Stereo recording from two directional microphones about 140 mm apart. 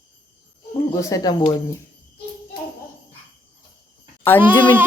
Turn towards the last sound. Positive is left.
turn(degrees=-15)  # may be behind; listen again after turning